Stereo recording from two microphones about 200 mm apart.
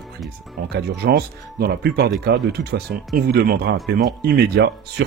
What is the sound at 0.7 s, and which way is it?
Speech, 55° right (ahead or behind).